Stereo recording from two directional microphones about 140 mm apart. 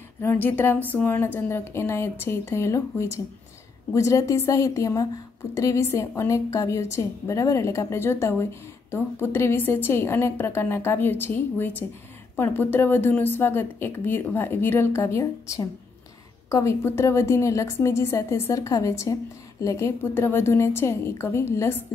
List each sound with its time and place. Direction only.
0.2 s a woman's voice: 15° left (ahead or behind)